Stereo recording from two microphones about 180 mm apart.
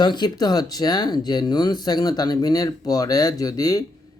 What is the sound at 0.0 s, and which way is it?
Speech, 25° left (ahead or behind).